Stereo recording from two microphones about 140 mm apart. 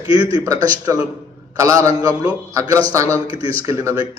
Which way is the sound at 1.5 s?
20° right (ahead or behind).